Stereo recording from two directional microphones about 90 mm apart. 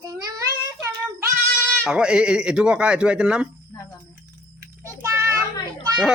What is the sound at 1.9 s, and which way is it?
Speech, 10° right (ahead or behind).